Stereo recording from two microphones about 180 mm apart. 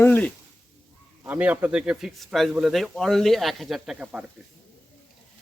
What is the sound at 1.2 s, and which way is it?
Speech, 10° right (ahead or behind).